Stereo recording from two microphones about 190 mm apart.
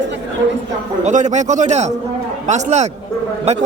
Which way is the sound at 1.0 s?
40° right (ahead or behind).